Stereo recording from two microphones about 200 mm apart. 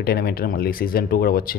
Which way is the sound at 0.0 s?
50° left (ahead or behind).